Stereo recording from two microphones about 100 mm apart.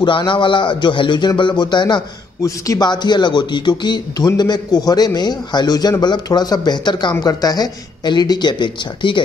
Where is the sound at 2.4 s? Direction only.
35° left (ahead or behind).